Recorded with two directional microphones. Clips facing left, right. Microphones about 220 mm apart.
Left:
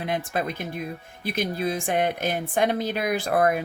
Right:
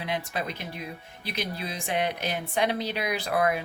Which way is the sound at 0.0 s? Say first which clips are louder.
Left 4 dB; 50° left (ahead or behind).